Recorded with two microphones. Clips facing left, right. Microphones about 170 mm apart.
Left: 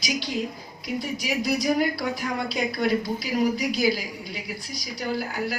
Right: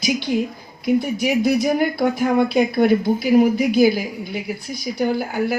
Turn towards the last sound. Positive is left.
turn(degrees=-55)  # may be behind; listen again after turning